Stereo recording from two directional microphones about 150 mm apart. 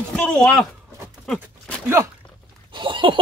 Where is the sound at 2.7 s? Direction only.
35° right (ahead or behind).